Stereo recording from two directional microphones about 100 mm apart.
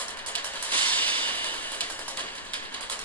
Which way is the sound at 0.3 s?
15° left (ahead or behind).